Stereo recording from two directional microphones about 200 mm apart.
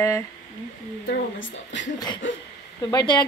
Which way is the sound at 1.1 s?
70° left (ahead or behind).